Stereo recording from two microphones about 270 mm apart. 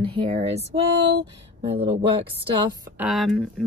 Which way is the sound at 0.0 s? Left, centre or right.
Centre.